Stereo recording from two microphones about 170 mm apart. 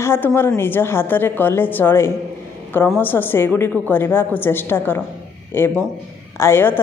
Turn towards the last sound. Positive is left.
turn(degrees=15)  # may be behind; listen again after turning